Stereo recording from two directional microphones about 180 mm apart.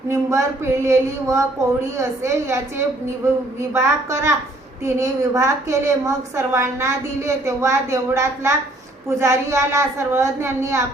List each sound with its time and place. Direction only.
0.1 s a woman's voice: 15° right (ahead or behind)
3.7 s a woman's voice: 15° right (ahead or behind)